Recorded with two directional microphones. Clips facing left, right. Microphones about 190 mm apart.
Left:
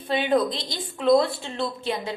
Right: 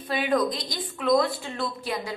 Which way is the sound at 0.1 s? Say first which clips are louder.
Left 2 dB; 30° left (ahead or behind).